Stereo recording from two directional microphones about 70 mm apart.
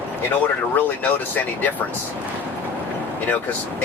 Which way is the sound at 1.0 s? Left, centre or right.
Left.